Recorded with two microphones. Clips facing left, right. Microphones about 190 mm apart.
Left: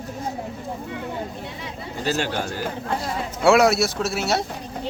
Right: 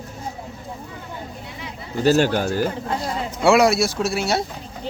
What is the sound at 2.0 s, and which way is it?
Speech, 40° right (ahead or behind).